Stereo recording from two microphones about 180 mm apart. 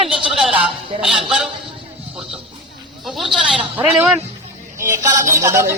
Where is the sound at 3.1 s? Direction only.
Centre (ahead or behind).